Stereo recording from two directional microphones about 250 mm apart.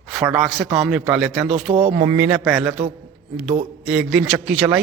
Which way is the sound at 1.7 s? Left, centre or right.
Right.